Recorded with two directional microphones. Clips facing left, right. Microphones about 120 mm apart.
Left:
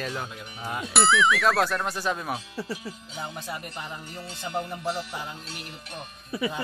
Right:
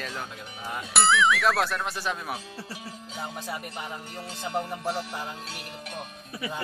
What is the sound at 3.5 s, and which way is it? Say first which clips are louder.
Speech: right 1 dB; 5° right (ahead or behind).